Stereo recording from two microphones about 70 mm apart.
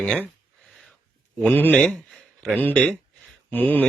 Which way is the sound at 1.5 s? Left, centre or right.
Left.